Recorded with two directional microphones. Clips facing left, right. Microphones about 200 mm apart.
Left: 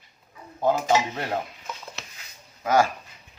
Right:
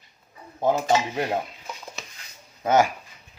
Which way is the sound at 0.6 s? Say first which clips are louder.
Even; 15° right (ahead or behind).